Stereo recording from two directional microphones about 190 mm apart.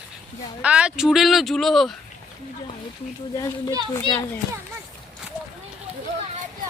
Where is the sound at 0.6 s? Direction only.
5° right (ahead or behind).